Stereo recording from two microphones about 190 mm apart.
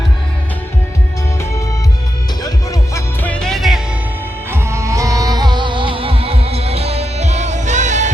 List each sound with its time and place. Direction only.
2.4 s music: 20° left (ahead or behind); by 3.8 s centre (ahead or behind)
4.5 s music: 15° right (ahead or behind); by 8.1 s 40° right (ahead or behind)